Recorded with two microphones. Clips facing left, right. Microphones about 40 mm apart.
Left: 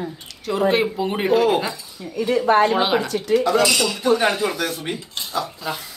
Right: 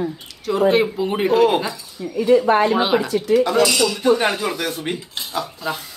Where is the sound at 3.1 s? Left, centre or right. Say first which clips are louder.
Right 1 dB; right.